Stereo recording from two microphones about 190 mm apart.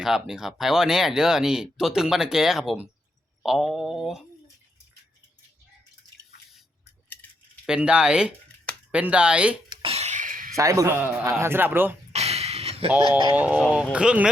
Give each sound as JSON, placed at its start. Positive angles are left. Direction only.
{"t": 0.0, "sound": "speech", "side_deg": 0}
{"t": 7.1, "sound": "keys jangling", "side_deg": 10}
{"t": 7.7, "sound": "speech", "side_deg": -5}
{"t": 9.6, "sound": "a sound", "side_deg": -30}
{"t": 10.6, "sound": "speech", "side_deg": -15}
{"t": 12.1, "sound": "a sound", "side_deg": -35}
{"t": 13.3, "sound": "speech", "side_deg": -10}